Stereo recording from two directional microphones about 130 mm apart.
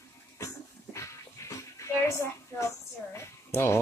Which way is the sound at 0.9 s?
25° left (ahead or behind).